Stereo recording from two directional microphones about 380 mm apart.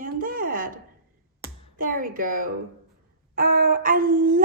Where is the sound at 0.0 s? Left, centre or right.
Right.